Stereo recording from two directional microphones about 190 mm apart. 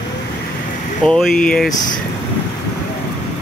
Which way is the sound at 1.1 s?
5° left (ahead or behind).